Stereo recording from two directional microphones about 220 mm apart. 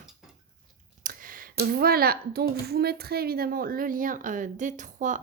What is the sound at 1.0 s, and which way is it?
Speech, 40° right (ahead or behind).